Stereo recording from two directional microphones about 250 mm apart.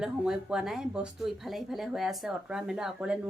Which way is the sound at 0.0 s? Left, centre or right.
Centre.